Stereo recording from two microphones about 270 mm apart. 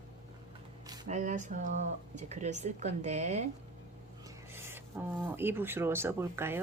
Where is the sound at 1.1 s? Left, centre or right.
Right.